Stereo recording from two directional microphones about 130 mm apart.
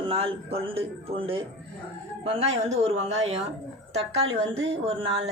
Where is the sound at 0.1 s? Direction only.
50° right (ahead or behind).